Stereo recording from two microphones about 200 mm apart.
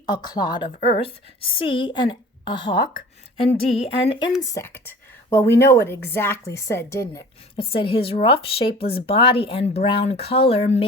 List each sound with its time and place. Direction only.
0.0 s a woman's voice: 20° left (ahead or behind)
4.4 s a woman's voice: 15° left (ahead or behind); by 10.8 s 30° left (ahead or behind)